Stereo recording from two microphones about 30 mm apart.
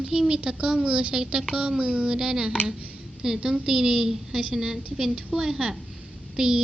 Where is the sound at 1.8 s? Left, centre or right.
Right.